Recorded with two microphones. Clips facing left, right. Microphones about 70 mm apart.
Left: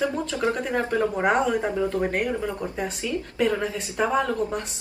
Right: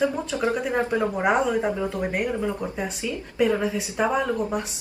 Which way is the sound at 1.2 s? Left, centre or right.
Centre.